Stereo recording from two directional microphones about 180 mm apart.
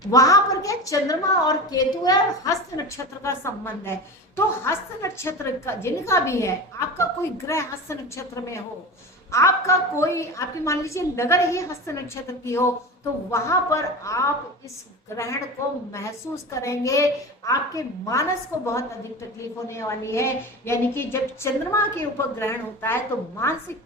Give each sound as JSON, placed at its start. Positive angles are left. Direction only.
{"t": 0.1, "sound": "a woman's voice", "side_deg": 20}